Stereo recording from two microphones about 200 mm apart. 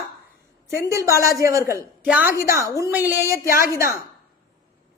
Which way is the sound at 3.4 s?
45° left (ahead or behind).